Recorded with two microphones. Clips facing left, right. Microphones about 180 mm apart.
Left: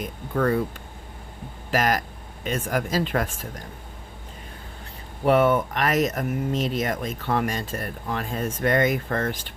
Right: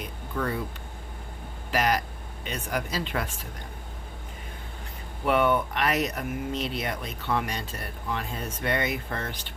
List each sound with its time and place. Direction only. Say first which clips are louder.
0.0 s a sound: left 7 dB; 50° left (ahead or behind)
1.7 s speech: left 2 dB; 45° left (ahead or behind)
5.2 s speech: left 4 dB; 40° left (ahead or behind)